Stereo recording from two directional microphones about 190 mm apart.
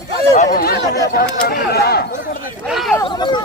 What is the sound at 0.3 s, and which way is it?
Speech, 45° left (ahead or behind).